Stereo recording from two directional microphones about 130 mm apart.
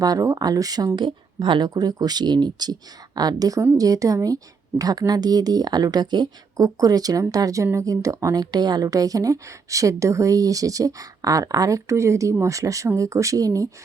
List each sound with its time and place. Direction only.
0.0 s speech: 25° right (ahead or behind)